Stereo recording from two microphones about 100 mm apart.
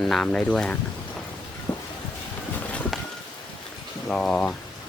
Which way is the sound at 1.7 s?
30° left (ahead or behind).